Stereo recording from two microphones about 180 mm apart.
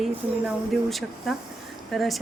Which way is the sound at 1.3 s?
Centre (ahead or behind).